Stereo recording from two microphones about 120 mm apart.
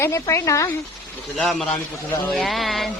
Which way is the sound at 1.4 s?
Centre (ahead or behind).